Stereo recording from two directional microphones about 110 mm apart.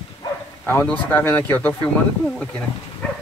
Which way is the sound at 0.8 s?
15° left (ahead or behind).